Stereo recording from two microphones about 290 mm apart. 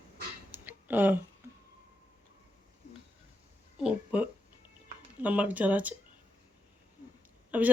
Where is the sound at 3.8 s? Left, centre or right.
Centre.